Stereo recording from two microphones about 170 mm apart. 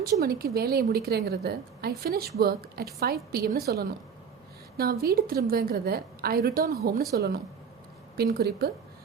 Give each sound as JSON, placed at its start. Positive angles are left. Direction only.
{"t": 0.0, "sound": "a woman's voice", "side_deg": -65}
{"t": 5.0, "sound": "a woman's voice", "side_deg": -60}